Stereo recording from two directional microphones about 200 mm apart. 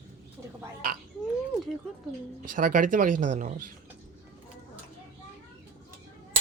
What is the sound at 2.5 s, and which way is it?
Speech, 45° right (ahead or behind).